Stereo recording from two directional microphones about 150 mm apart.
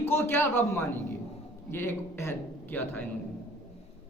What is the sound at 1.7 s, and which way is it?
A man's voice, 15° left (ahead or behind).